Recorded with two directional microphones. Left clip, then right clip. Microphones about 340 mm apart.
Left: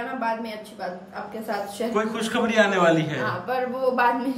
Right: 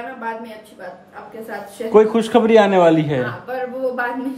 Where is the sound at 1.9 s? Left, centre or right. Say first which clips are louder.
Right 13 dB; centre.